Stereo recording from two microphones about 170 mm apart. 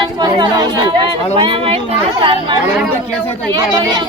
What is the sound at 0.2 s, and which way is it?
Chatter, 25° right (ahead or behind).